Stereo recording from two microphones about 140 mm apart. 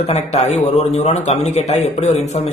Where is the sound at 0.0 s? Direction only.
50° left (ahead or behind).